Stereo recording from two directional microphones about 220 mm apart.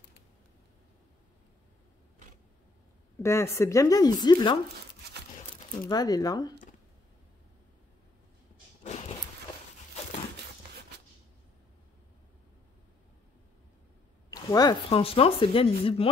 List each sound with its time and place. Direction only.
3.2 s speech: 15° left (ahead or behind)
5.9 s speech: 15° left (ahead or behind)
8.8 s walk: 30° left (ahead or behind)
14.3 s speech: 15° left (ahead or behind)